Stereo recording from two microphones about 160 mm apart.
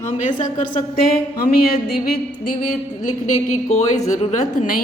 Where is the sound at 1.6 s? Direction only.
70° left (ahead or behind).